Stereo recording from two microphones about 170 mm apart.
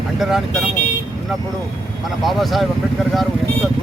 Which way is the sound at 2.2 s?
Centre (ahead or behind).